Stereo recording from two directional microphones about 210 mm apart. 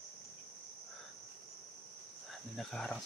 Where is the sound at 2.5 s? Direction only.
Centre (ahead or behind).